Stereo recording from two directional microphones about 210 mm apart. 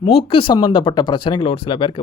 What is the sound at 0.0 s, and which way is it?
Speech, 25° left (ahead or behind).